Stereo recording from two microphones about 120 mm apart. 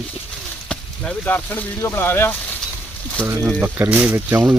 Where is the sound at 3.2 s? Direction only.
25° right (ahead or behind).